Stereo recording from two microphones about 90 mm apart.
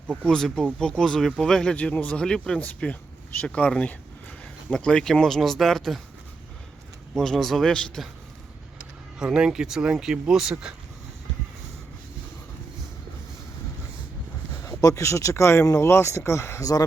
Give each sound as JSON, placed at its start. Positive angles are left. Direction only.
{"t": 0.3, "sound": "speech", "side_deg": 5}
{"t": 1.7, "sound": "speech", "side_deg": 15}
{"t": 7.2, "sound": "speech", "side_deg": 5}
{"t": 9.1, "sound": "speech", "side_deg": -10}
{"t": 14.6, "sound": "speech", "side_deg": 40}